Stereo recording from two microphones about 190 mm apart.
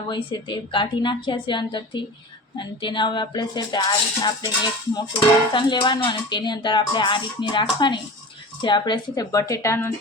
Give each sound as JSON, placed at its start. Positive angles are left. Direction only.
{"t": 0.1, "sound": "speech", "side_deg": 25}